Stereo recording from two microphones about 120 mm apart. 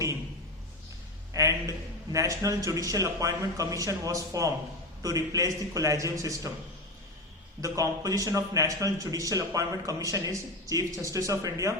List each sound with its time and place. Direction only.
1.3 s a sound: 25° right (ahead or behind)
2.1 s a man's voice: 25° right (ahead or behind)
7.6 s a man's voice: 30° right (ahead or behind)